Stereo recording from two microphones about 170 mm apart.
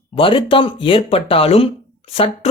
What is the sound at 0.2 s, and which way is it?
Speech, 30° left (ahead or behind).